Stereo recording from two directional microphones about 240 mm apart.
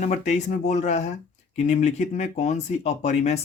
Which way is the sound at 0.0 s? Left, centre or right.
Left.